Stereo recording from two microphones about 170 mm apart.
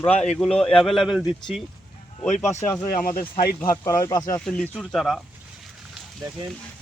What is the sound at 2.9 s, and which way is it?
Speech, 55° left (ahead or behind).